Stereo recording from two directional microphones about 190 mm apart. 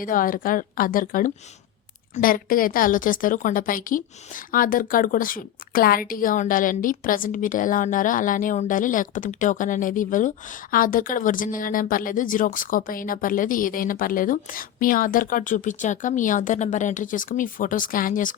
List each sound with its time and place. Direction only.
0.0 s a woman's voice: 45° left (ahead or behind)